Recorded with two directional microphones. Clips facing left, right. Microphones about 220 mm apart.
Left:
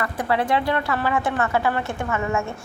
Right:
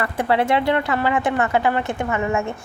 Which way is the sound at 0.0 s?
25° right (ahead or behind).